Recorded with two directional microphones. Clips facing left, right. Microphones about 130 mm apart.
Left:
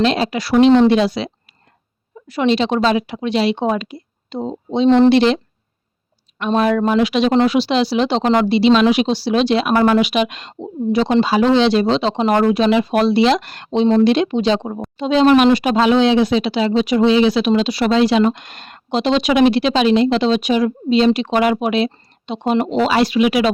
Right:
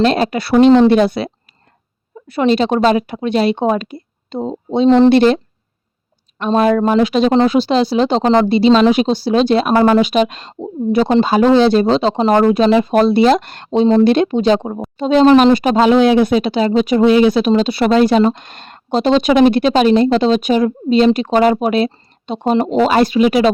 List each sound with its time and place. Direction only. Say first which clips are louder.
0.0 s speech: right 3 dB; 50° right (ahead or behind)
0.9 s speech: right 3 dB; 55° right (ahead or behind)
2.4 s speech: right 3 dB; 45° right (ahead or behind)
6.4 s speech: right 3 dB; 35° right (ahead or behind)
10.6 s speech: right 3 dB; 45° right (ahead or behind)
15.5 s speech: right 3 dB; 45° right (ahead or behind)
18.2 s speech: right 2 dB; 30° right (ahead or behind)
18.9 s speech: right 3 dB; 45° right (ahead or behind)